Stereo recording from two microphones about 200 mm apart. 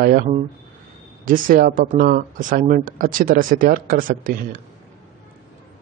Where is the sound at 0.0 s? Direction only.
45° right (ahead or behind).